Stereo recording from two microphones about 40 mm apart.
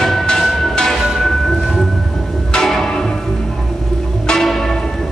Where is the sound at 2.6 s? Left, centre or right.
Centre.